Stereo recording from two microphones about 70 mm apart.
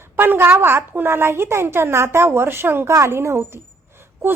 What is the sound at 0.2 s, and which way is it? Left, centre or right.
A woman's voice, right.